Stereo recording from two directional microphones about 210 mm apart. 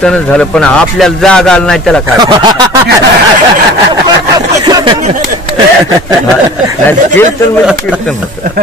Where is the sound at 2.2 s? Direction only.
20° right (ahead or behind).